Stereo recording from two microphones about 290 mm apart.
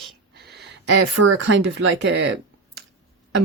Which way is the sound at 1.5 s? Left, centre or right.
Right.